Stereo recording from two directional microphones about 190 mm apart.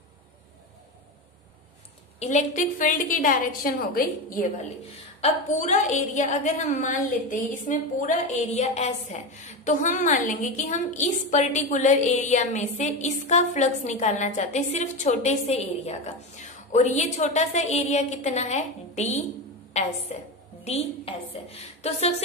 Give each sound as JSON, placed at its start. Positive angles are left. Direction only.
{"t": 2.1, "sound": "a woman's voice", "side_deg": 40}